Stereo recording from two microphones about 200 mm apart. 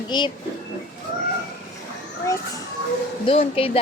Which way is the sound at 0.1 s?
20° left (ahead or behind).